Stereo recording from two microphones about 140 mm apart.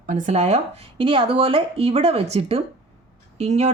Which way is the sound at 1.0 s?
40° right (ahead or behind).